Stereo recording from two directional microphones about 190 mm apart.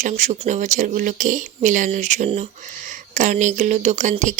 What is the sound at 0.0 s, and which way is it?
Speech, 40° right (ahead or behind).